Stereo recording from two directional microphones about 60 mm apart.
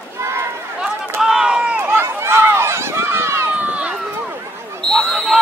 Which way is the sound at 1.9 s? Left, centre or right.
Right.